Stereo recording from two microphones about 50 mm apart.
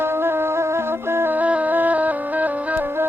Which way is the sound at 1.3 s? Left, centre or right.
Right.